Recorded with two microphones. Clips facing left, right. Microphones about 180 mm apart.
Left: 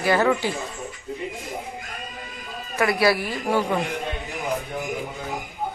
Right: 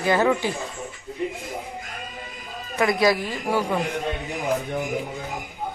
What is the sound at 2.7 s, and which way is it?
Speech, 15° right (ahead or behind).